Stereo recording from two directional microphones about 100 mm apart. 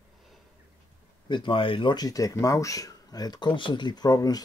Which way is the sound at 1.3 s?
55° left (ahead or behind).